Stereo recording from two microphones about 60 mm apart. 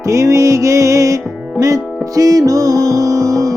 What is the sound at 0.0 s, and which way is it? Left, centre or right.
Music, right.